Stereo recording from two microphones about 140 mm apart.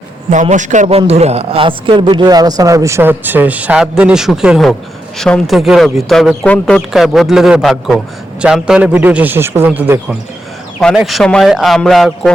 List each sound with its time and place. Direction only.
0.4 s a man's voice: 60° right (ahead or behind); by 10.2 s 15° right (ahead or behind)
10.9 s speech: centre (ahead or behind)